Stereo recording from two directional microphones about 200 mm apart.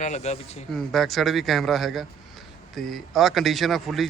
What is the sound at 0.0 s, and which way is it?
Speech, 35° left (ahead or behind).